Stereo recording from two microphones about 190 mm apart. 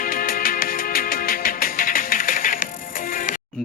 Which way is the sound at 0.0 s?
50° left (ahead or behind).